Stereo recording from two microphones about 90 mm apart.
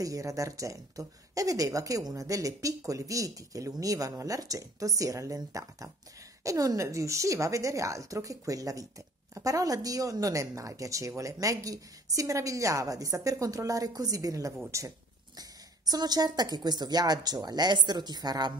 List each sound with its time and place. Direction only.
0.0 s speech: 40° right (ahead or behind)
15.3 s speech: 45° right (ahead or behind)